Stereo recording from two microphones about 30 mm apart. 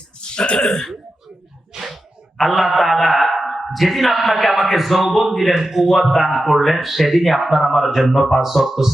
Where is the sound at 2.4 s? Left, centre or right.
Centre.